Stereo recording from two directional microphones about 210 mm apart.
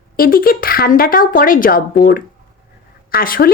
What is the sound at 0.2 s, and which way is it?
Speech, 45° left (ahead or behind).